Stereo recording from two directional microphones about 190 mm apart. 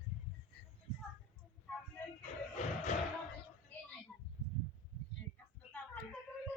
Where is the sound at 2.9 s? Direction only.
35° left (ahead or behind).